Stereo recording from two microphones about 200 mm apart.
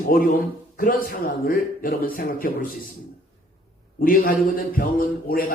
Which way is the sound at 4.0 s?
45° left (ahead or behind).